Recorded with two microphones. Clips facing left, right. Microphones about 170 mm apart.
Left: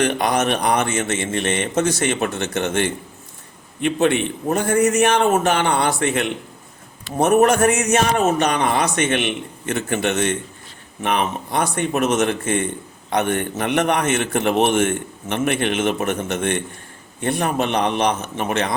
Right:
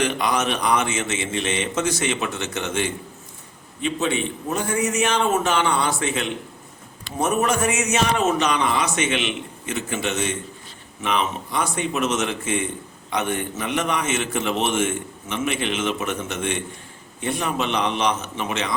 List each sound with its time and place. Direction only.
0.0 s a man's voice: 60° left (ahead or behind)